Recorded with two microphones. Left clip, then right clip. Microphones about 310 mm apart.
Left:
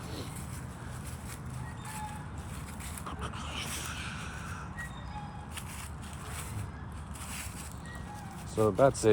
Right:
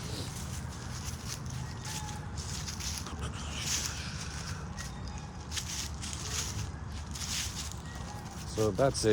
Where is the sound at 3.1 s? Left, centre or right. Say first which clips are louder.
Left 2 dB; left.